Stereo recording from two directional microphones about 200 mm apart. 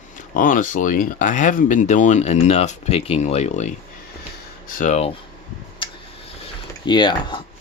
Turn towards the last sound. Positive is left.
turn(degrees=20)  # may be behind; listen again after turning